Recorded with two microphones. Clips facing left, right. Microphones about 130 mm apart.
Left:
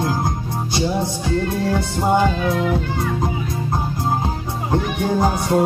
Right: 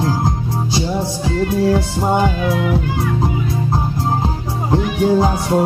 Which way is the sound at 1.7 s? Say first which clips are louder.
Right 2 dB; 5° right (ahead or behind).